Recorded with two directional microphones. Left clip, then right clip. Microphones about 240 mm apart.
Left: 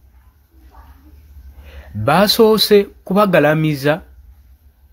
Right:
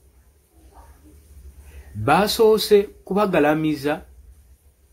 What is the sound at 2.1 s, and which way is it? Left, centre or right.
Speech, left.